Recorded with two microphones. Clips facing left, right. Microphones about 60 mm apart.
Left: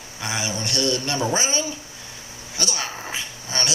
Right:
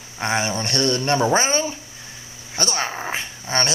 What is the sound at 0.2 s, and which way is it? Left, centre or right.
Speech, right.